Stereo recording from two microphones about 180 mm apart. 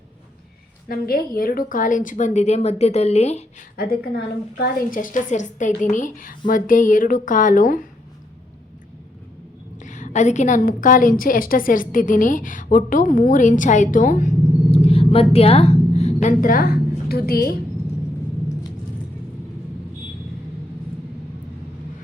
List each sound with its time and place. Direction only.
0.9 s a woman's voice: 55° left (ahead or behind); by 3.4 s 35° left (ahead or behind)
3.8 s a woman's voice: 55° left (ahead or behind)
9.8 s a woman's voice: 45° left (ahead or behind)
14.7 s a sound: 35° left (ahead or behind); by 17.6 s 55° left (ahead or behind)